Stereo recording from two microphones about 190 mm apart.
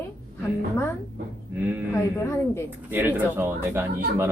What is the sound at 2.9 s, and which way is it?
Speech, 10° right (ahead or behind).